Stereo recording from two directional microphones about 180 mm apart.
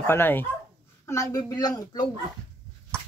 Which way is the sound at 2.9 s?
5° left (ahead or behind).